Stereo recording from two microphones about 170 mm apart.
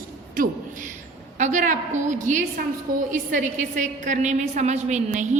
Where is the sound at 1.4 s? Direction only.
45° right (ahead or behind).